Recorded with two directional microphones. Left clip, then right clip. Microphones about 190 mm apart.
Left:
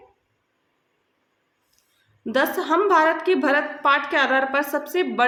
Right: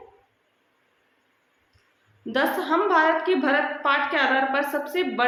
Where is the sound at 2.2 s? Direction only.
40° left (ahead or behind).